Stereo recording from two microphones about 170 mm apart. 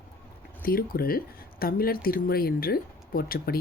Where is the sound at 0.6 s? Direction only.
60° left (ahead or behind).